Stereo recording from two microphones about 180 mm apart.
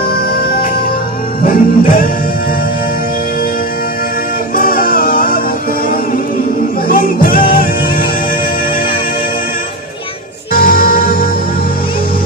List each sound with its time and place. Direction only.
0.1 s music: 55° left (ahead or behind)
4.6 s music: 55° left (ahead or behind)
6.9 s music: 50° left (ahead or behind)
10.5 s music: 55° left (ahead or behind)